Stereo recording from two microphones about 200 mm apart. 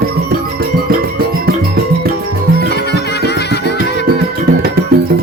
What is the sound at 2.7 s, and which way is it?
Music, 55° left (ahead or behind).